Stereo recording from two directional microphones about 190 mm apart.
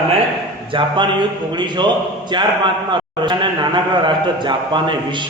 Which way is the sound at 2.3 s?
25° right (ahead or behind).